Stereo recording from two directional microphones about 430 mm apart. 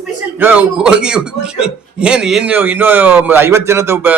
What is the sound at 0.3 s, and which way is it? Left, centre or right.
A man's voice, centre.